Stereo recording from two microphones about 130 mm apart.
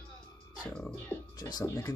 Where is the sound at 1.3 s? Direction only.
30° left (ahead or behind).